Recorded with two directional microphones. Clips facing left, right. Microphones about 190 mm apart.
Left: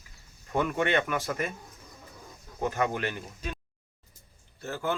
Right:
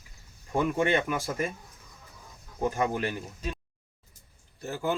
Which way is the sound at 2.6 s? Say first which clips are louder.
Right 1 dB; 10° right (ahead or behind).